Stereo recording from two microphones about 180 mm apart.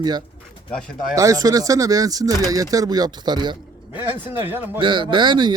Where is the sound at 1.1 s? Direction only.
20° right (ahead or behind).